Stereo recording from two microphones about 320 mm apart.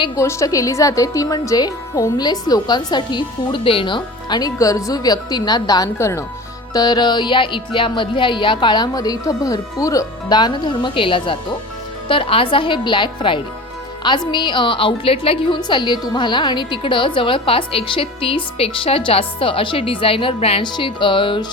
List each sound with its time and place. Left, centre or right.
0.0 s a woman's voice: centre